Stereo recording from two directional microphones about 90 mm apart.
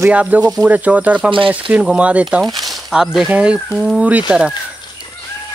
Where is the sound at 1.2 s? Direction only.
70° right (ahead or behind).